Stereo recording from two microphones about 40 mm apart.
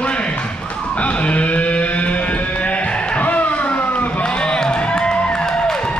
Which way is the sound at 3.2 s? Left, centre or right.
Left.